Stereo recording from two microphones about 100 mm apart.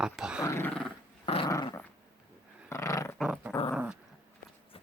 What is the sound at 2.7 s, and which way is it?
Roar, 30° left (ahead or behind).